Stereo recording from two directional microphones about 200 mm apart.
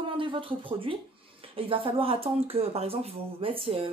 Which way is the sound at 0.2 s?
25° right (ahead or behind).